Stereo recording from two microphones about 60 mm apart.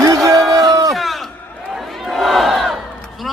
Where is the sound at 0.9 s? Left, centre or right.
Centre.